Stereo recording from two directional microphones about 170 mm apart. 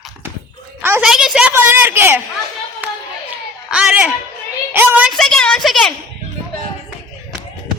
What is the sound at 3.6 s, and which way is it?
A woman's voice, 5° right (ahead or behind).